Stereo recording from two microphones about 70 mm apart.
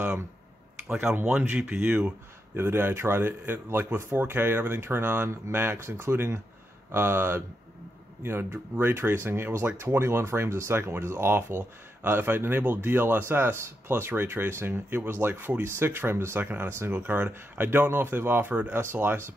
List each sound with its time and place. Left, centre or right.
1.1 s speech: centre
2.5 s speech: right